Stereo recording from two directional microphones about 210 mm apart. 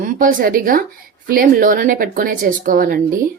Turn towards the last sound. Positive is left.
turn(degrees=-40)  # may be behind; listen again after turning